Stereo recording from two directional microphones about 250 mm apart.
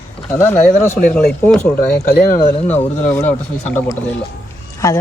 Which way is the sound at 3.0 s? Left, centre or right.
Centre.